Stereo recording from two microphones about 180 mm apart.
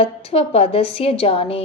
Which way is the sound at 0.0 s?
35° left (ahead or behind).